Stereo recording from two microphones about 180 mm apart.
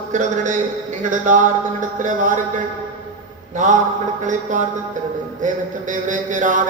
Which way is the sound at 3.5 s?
45° right (ahead or behind).